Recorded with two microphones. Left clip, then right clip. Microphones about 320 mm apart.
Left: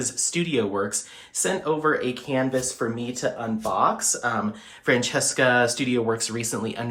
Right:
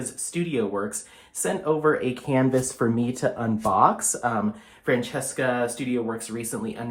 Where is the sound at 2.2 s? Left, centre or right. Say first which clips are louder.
Right 4 dB; right.